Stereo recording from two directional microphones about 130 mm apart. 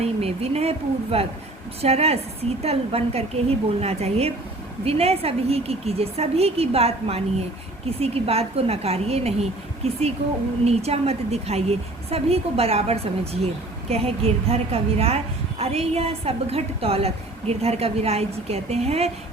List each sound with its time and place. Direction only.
0.0 s a woman's voice: 55° right (ahead or behind)